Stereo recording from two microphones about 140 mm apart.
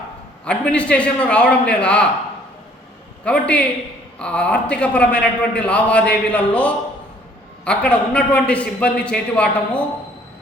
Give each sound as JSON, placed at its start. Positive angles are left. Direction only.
{"t": 0.4, "sound": "a man's voice", "side_deg": 10}
{"t": 3.2, "sound": "a man's voice", "side_deg": 10}